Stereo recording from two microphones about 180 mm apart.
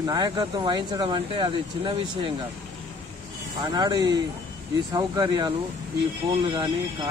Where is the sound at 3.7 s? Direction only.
20° right (ahead or behind).